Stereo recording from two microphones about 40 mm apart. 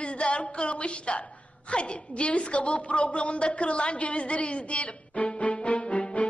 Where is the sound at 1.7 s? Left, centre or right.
Left.